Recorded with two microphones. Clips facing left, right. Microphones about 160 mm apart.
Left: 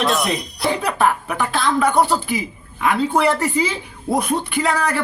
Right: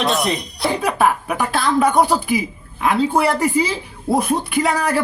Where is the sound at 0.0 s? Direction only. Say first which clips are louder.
Even; centre (ahead or behind).